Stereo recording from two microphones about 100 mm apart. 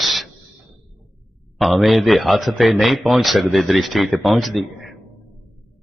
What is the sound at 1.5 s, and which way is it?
Speech, centre (ahead or behind).